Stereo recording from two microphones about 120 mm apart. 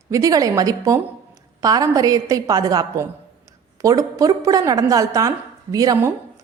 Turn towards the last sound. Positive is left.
turn(degrees=-30)  # may be behind; listen again after turning